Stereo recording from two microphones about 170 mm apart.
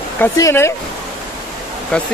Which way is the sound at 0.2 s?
15° left (ahead or behind).